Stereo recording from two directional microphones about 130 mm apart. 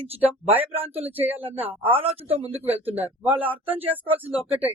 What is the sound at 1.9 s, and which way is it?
Speech, 45° right (ahead or behind).